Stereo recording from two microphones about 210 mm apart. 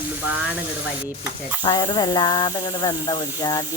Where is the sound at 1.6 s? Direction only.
20° left (ahead or behind).